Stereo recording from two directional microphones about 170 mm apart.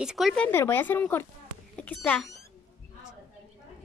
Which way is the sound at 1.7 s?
5° left (ahead or behind).